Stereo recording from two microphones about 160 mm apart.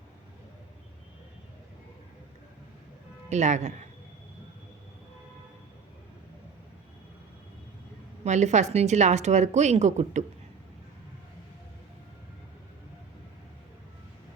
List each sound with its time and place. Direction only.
3.2 s speech: 45° right (ahead or behind)
8.2 s speech: 45° right (ahead or behind)